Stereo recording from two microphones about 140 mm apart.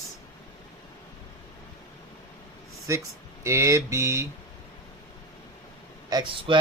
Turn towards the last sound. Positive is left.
turn(degrees=-35)  # may be behind; listen again after turning